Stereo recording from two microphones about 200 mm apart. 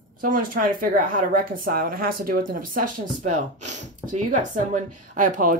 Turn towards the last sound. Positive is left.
turn(degrees=-40)  # may be behind; listen again after turning